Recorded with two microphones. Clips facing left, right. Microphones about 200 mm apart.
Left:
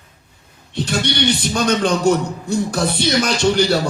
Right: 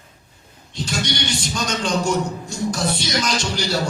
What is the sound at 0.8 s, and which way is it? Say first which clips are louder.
Speech: left 5 dB; 60° left (ahead or behind).